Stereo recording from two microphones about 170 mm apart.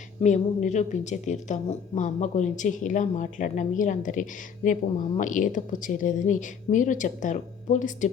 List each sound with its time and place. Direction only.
0.2 s a woman's voice: 45° left (ahead or behind)